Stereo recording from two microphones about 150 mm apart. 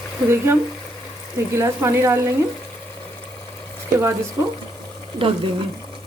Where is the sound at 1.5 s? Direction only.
20° right (ahead or behind).